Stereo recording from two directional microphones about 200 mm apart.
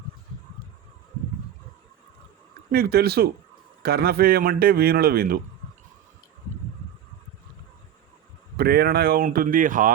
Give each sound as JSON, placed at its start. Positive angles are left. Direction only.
{"t": 2.7, "sound": "a man's voice", "side_deg": -50}
{"t": 8.5, "sound": "a man's voice", "side_deg": -50}